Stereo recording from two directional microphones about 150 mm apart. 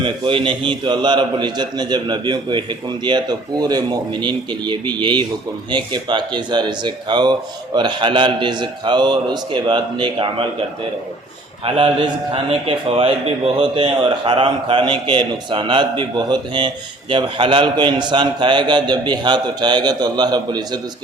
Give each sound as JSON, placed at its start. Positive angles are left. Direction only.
{"t": 0.0, "sound": "a man's voice", "side_deg": -35}
{"t": 11.6, "sound": "a man's voice", "side_deg": -35}